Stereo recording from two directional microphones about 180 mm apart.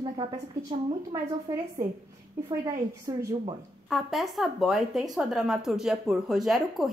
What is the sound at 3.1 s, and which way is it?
Speech, 20° right (ahead or behind).